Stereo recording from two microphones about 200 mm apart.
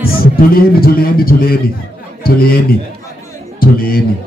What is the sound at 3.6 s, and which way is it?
Music, 45° left (ahead or behind).